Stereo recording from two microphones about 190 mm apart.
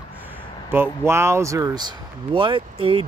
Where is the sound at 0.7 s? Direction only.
10° right (ahead or behind).